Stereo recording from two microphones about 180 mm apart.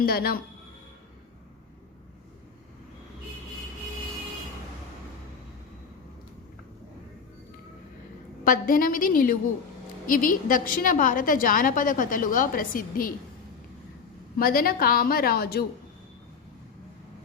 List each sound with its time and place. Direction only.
0.0 s a woman's voice: 55° left (ahead or behind)
8.4 s a woman's voice: 50° left (ahead or behind)
14.3 s a woman's voice: 55° left (ahead or behind)